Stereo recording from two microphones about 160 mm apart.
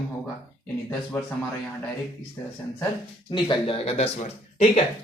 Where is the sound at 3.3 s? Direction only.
30° left (ahead or behind).